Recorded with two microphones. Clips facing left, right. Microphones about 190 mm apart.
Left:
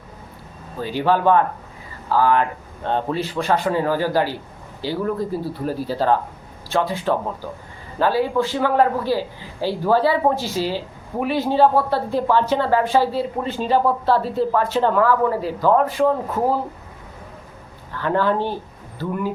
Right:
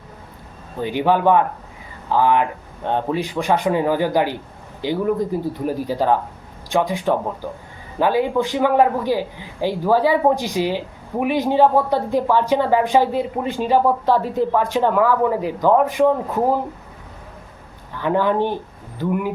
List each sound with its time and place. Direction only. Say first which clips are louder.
0.8 s a man's voice: right 1 dB; 15° right (ahead or behind)
18.0 s a man's voice: right 2 dB; 15° right (ahead or behind)